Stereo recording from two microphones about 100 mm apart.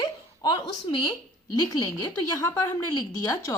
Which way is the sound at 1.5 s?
40° left (ahead or behind).